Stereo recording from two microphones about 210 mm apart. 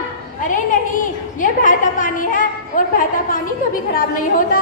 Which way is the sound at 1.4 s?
40° left (ahead or behind).